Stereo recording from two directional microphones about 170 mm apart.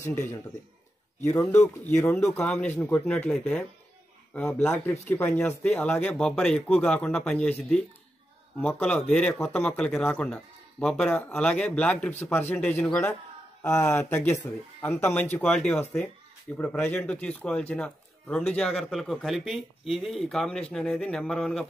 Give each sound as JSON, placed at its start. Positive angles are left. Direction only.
{"t": 0.1, "sound": "a man's voice", "side_deg": 45}
{"t": 1.3, "sound": "speech", "side_deg": 15}